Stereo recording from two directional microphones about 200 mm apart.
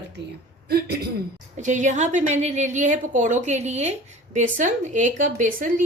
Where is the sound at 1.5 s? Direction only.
40° right (ahead or behind).